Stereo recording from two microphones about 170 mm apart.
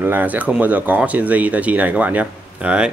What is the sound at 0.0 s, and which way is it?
Speech, 10° right (ahead or behind).